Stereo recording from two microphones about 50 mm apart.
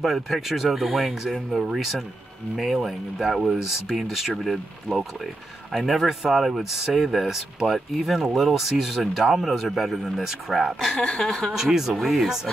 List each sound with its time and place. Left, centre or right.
0.0 s speech: centre
10.9 s speech: centre
11.5 s speech: centre